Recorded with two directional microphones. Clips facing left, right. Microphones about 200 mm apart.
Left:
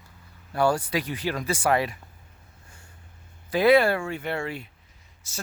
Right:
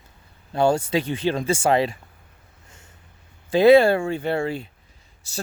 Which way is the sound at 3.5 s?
25° right (ahead or behind).